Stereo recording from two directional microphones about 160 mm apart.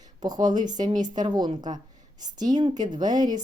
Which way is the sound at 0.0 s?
25° right (ahead or behind).